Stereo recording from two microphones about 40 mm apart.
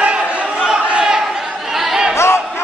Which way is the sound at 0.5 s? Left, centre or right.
Centre.